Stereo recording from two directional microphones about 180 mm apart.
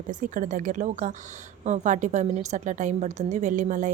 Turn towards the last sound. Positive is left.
turn(degrees=-45)  # may be behind; listen again after turning